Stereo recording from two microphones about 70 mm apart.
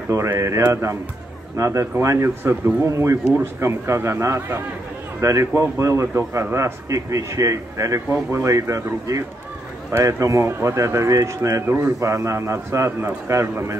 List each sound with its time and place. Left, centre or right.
0.1 s speech: right
1.6 s a man's voice: right
9.9 s a man's voice: right
11.6 s a man's voice: right
12.0 s a man's voice: right